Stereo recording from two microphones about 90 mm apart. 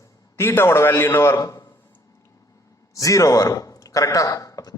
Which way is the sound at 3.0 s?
40° left (ahead or behind).